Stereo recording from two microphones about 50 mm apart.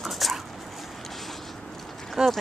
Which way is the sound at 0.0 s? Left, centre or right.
Centre.